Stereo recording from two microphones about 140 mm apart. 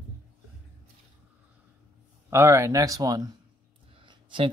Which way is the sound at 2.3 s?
20° right (ahead or behind).